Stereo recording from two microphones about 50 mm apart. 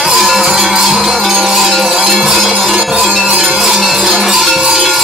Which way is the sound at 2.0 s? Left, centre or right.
Centre.